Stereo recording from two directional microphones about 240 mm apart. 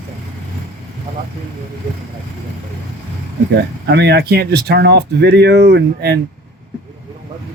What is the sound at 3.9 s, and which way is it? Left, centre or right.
Speech, right.